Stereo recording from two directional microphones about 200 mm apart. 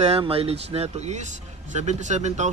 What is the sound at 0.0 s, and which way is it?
Speech, 30° right (ahead or behind).